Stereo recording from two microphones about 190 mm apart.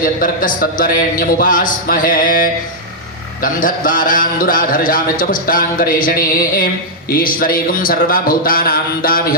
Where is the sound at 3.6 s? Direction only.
45° left (ahead or behind).